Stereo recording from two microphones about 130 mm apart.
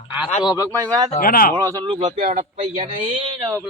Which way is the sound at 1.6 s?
25° right (ahead or behind).